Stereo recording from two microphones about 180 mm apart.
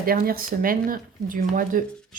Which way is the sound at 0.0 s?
55° right (ahead or behind).